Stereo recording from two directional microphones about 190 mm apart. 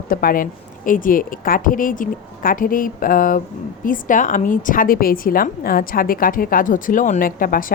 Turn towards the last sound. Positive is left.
turn(degrees=45)  # may be behind; listen again after turning